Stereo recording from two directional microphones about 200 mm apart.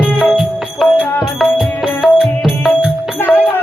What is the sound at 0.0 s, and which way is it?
Music, centre (ahead or behind).